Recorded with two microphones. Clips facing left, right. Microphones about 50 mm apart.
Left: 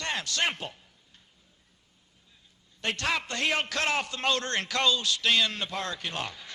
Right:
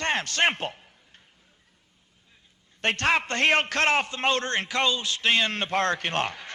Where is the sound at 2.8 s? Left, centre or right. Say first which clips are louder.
Right 6 dB; right.